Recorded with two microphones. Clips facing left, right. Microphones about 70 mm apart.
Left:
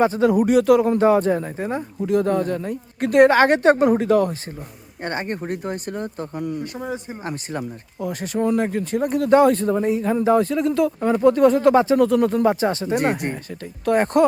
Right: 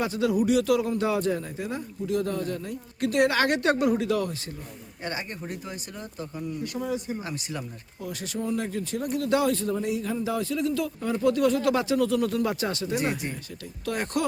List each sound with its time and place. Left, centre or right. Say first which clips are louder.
0.0 s a man's voice: left 8 dB; left
0.9 s a man's voice: left 9 dB; left
6.7 s a man's voice: left 1 dB; left
11.9 s speech: left 7 dB; left
12.9 s a man's voice: left 7 dB; left